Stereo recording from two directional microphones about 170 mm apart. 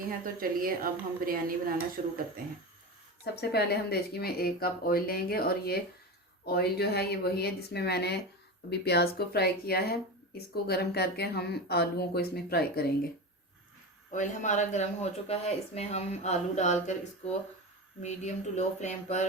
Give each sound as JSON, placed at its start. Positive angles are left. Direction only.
{"t": 0.3, "sound": "a woman's voice", "side_deg": -60}
{"t": 3.5, "sound": "speech", "side_deg": 70}
{"t": 14.1, "sound": "speech", "side_deg": 45}